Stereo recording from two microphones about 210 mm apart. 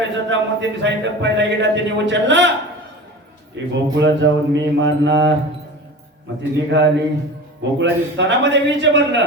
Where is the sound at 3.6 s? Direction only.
60° right (ahead or behind).